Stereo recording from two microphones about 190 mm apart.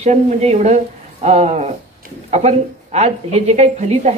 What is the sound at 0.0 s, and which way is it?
Speech, 35° right (ahead or behind).